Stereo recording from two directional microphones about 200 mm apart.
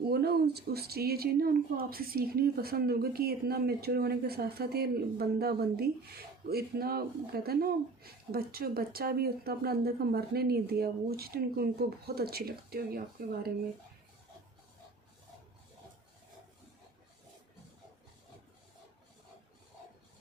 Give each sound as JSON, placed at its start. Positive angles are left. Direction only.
{"t": 0.0, "sound": "a woman's voice", "side_deg": -55}